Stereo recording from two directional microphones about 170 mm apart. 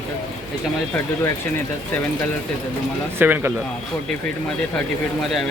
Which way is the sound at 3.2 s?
10° right (ahead or behind).